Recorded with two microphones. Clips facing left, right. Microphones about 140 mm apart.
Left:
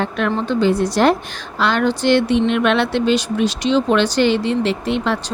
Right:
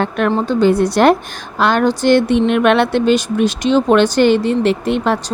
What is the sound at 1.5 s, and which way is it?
Speech, 45° right (ahead or behind).